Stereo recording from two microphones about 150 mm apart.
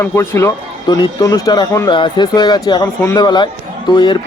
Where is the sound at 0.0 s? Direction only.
15° left (ahead or behind).